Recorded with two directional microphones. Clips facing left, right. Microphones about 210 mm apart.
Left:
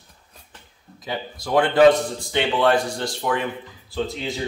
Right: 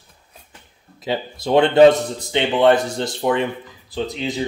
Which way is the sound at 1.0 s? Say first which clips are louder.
Right 6 dB; 25° right (ahead or behind).